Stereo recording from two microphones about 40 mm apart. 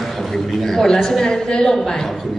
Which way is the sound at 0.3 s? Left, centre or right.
Centre.